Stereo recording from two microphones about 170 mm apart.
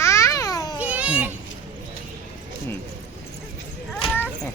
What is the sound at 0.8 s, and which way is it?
Children playing, 5° right (ahead or behind).